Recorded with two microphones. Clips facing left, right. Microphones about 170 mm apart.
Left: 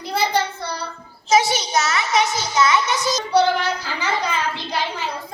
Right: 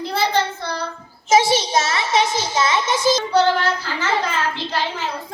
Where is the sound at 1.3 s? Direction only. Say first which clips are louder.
Right 2 dB; 30° right (ahead or behind).